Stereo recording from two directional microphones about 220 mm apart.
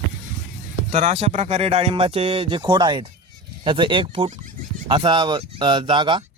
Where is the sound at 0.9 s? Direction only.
30° right (ahead or behind).